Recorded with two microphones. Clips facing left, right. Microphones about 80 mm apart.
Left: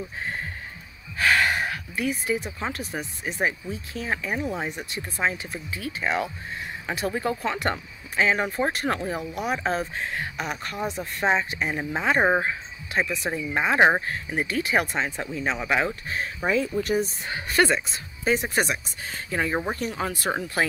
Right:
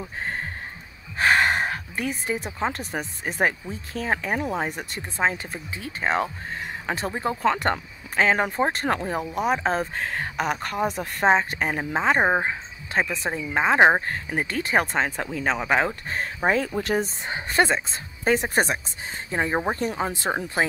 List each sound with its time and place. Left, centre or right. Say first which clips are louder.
0.0 s speech: right 1 dB; right
7.4 s speech: right 4 dB; right
9.9 s speech: right 3 dB; right
11.8 s speech: right 3 dB; right
12.2 s speech: even; centre
12.9 s speech: right 1 dB; right
14.0 s speech: right 1 dB; right
16.6 s speech: even; right
17.0 s speech: even; right
17.9 s speech: right 2 dB; right
19.3 s speech: right 2 dB; right